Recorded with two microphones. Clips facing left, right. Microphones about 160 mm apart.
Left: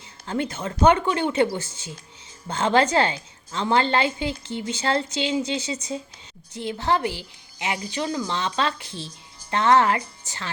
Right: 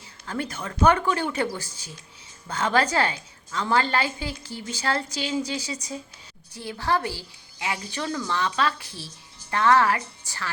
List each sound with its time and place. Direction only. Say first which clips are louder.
0.3 s a woman's voice: left 4 dB; 25° left (ahead or behind)